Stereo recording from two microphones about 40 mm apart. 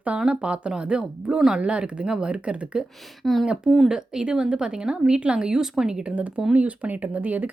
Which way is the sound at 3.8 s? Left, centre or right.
Centre.